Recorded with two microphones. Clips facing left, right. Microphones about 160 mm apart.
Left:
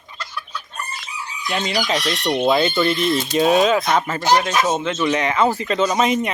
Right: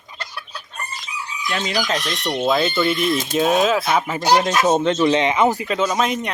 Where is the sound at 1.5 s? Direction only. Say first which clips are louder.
Left 1 dB; centre (ahead or behind).